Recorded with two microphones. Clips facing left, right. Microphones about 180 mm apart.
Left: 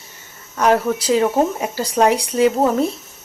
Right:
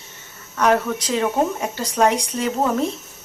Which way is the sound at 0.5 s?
30° left (ahead or behind).